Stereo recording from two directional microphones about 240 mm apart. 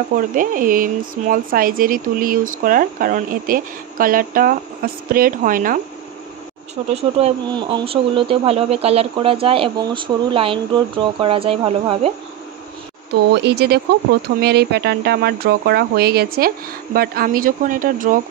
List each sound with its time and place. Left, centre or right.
0.1 s speech: right
6.9 s speech: right
13.1 s speech: right